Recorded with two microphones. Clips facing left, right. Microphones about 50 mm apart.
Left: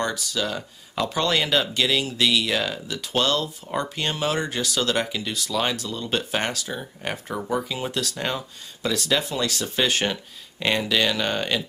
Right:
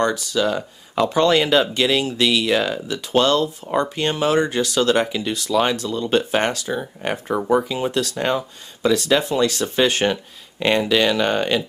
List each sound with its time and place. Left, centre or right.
0.0 s speech: right